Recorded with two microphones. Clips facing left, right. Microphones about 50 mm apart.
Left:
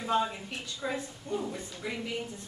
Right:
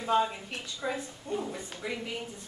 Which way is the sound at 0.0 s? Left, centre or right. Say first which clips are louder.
Right 2 dB; centre.